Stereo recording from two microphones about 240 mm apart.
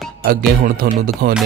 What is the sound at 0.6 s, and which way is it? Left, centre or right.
Speech, right.